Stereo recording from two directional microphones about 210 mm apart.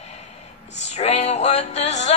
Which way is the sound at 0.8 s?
30° left (ahead or behind).